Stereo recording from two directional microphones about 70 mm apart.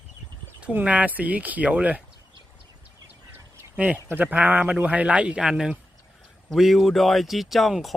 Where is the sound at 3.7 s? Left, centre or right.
Centre.